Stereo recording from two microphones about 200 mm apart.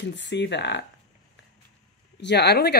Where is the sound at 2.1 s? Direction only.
55° left (ahead or behind).